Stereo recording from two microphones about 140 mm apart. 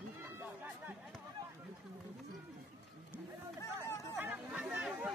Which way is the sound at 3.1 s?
20° left (ahead or behind).